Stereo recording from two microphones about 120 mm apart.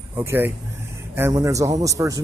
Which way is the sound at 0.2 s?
20° right (ahead or behind).